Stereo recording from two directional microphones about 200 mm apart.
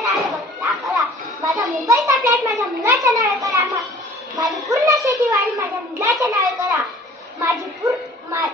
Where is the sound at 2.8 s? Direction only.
15° right (ahead or behind).